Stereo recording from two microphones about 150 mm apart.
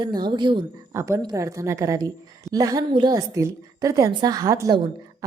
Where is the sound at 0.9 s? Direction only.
20° right (ahead or behind).